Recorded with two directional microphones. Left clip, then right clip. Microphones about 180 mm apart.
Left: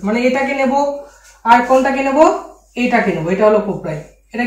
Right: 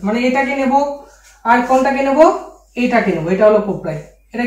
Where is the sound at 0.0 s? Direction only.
15° right (ahead or behind).